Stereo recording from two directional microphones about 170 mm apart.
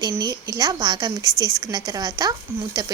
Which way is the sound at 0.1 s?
20° right (ahead or behind).